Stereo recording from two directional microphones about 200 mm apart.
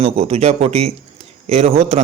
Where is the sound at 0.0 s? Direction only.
30° right (ahead or behind).